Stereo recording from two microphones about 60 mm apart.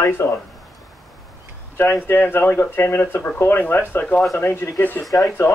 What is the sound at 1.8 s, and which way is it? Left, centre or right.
Speech, left.